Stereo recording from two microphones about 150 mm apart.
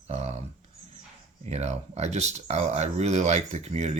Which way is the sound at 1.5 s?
45° right (ahead or behind).